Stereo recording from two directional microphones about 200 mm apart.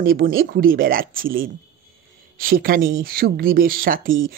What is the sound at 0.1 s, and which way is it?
Speech, 45° right (ahead or behind).